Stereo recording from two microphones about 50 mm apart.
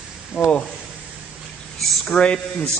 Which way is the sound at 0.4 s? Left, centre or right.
Centre.